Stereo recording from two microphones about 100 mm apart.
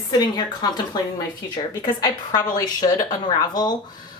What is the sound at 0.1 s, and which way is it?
Speech, 45° left (ahead or behind).